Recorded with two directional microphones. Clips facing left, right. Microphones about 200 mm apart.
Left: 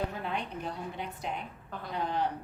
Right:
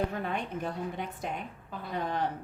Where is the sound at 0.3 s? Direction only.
50° right (ahead or behind).